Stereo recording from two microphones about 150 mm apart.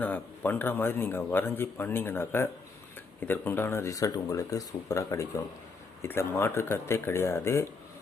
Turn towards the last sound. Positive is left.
turn(degrees=20)  # may be behind; listen again after turning